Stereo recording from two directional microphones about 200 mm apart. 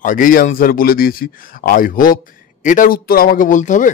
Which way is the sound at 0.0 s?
40° left (ahead or behind).